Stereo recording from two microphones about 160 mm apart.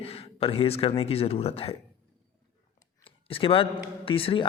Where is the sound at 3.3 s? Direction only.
35° left (ahead or behind).